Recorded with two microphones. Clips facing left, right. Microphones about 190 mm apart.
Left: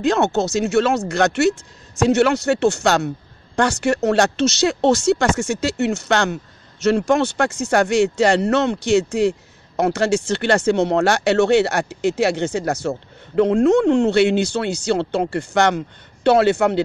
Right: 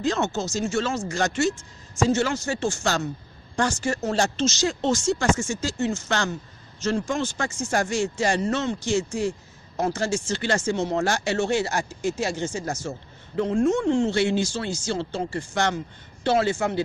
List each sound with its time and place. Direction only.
0.0 s speech: 65° left (ahead or behind)